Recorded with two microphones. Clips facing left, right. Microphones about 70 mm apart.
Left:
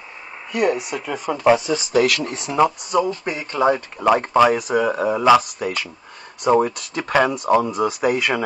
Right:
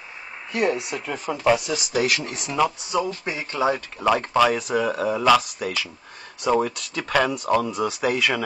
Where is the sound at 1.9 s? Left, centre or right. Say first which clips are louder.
Left 5 dB; left.